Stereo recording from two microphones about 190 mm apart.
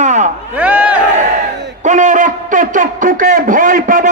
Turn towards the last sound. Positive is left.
turn(degrees=-45)  # may be behind; listen again after turning